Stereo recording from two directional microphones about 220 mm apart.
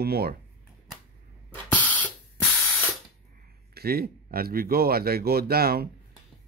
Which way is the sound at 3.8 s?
45° right (ahead or behind).